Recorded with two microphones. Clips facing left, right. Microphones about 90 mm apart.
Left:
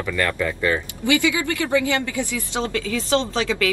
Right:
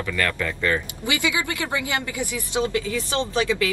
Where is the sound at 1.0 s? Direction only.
20° right (ahead or behind).